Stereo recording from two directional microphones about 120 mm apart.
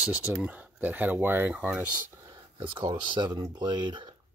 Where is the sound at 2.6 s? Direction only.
45° right (ahead or behind).